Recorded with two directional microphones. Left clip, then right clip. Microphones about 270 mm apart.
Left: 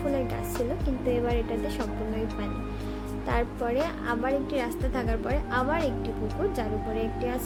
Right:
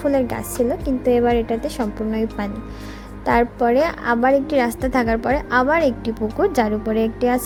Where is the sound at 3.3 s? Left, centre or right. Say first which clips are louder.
Right 12 dB; right.